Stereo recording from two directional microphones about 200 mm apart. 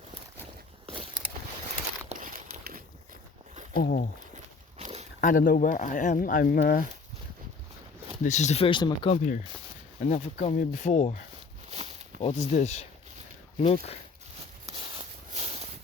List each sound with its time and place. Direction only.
0.9 s a sound: 25° right (ahead or behind)
2.0 s crumpling: 40° right (ahead or behind)
3.8 s speech: 45° left (ahead or behind)
4.8 s walk: 30° right (ahead or behind)
5.2 s speech: 45° left (ahead or behind)
8.2 s speech: 35° left (ahead or behind)
10.0 s speech: 40° left (ahead or behind)
11.7 s walk: 30° right (ahead or behind)
12.2 s speech: 30° left (ahead or behind)
14.8 s a sound: 25° right (ahead or behind)